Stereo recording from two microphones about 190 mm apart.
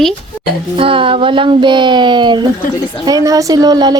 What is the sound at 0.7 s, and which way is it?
Speech, 30° right (ahead or behind).